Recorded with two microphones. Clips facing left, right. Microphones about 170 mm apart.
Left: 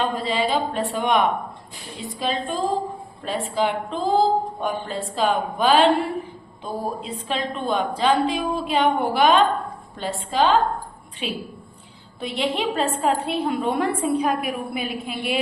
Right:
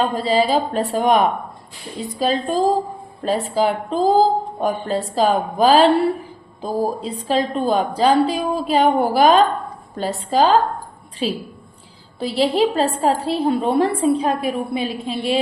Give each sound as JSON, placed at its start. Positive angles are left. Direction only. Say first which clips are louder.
{"t": 0.0, "sound": "a woman's voice", "louder": "right 5 dB", "side_deg": -40}